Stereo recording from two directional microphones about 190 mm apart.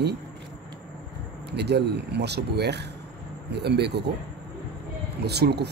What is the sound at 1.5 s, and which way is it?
Speech, 60° right (ahead or behind).